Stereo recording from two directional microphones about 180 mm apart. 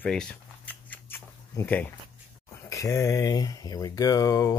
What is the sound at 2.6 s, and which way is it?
Speech, 15° left (ahead or behind).